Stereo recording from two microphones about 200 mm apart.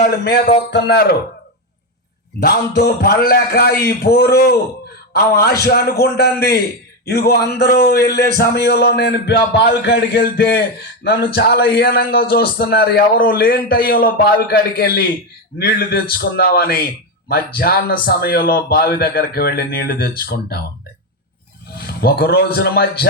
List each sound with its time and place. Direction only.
0.3 s a man's voice: 50° left (ahead or behind)
2.4 s a man's voice: 50° left (ahead or behind)
21.8 s a man's voice: 50° left (ahead or behind)